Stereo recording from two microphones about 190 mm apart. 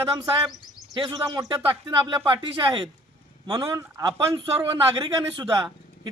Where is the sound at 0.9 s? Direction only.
20° right (ahead or behind).